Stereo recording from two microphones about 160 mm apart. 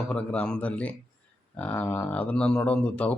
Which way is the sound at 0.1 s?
10° left (ahead or behind).